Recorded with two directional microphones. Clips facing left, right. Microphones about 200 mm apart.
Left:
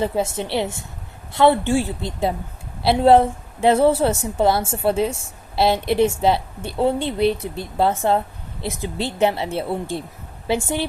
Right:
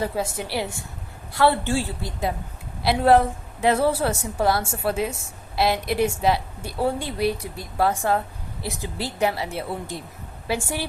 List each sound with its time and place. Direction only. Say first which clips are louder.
0.0 s a woman's voice: left 4 dB; 25° left (ahead or behind)